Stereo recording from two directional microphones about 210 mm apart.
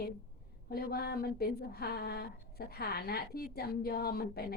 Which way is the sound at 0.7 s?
45° left (ahead or behind).